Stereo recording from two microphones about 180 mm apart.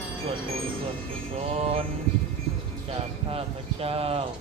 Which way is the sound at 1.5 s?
35° right (ahead or behind).